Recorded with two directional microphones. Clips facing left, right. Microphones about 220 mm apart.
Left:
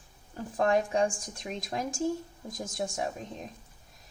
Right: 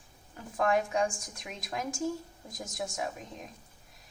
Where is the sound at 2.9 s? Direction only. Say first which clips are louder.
Left 3 dB; 30° left (ahead or behind).